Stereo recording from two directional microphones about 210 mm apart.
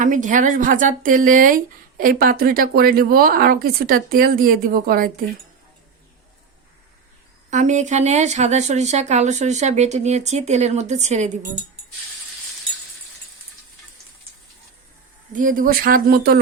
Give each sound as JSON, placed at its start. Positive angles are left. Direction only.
{"t": 0.0, "sound": "speech", "side_deg": -35}
{"t": 7.5, "sound": "speech", "side_deg": -35}
{"t": 15.3, "sound": "speech", "side_deg": -40}